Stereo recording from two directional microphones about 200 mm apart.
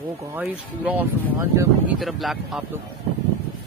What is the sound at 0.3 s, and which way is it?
Speech, 10° right (ahead or behind).